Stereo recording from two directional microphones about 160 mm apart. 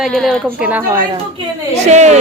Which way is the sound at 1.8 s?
45° right (ahead or behind).